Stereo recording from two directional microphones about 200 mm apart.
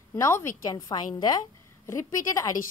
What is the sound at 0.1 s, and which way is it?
A woman's voice, 15° left (ahead or behind).